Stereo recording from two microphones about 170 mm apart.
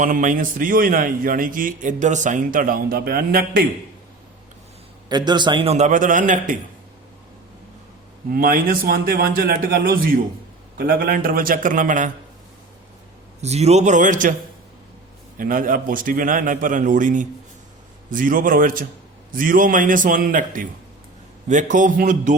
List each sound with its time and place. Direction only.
0.0 s a man's voice: 50° right (ahead or behind)
5.0 s a man's voice: 25° right (ahead or behind)
5.7 s a man's voice: 45° right (ahead or behind)
8.3 s a man's voice: 55° right (ahead or behind)
13.4 s a man's voice: 40° right (ahead or behind)
15.4 s a man's voice: 55° right (ahead or behind)